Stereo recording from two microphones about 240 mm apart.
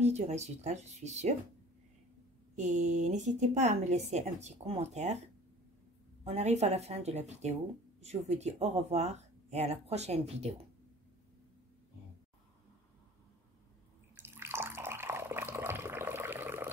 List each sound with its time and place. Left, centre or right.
0.0 s speech: right
2.5 s speech: right
6.2 s speech: right
14.1 s bathtub: centre